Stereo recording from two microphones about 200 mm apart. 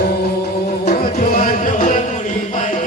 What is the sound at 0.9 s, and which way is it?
Music, 40° left (ahead or behind).